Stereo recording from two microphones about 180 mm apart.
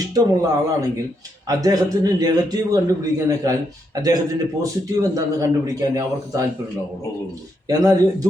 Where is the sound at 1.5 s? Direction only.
20° right (ahead or behind).